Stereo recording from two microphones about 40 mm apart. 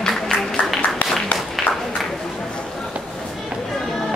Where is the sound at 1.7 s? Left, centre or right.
Left.